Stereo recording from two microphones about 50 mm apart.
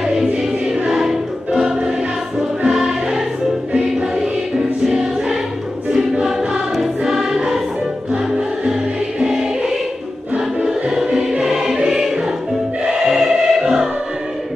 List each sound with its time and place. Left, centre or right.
0.0 s music: centre
6.8 s music: centre
10.3 s choir: centre
11.5 s music: centre